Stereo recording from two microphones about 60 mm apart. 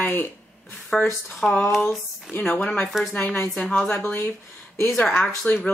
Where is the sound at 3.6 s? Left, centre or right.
Centre.